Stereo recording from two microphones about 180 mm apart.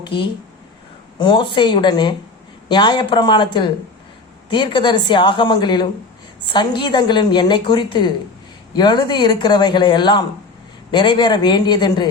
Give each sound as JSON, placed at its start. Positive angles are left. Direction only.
{"t": 0.0, "sound": "a woman's voice", "side_deg": 25}